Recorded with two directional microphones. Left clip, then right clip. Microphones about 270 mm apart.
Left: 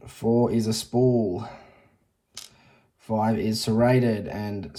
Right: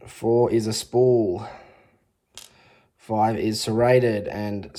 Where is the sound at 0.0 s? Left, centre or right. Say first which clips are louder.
Right 3 dB; right.